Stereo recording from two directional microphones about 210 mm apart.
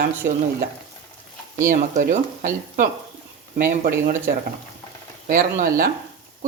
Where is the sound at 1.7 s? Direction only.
40° right (ahead or behind).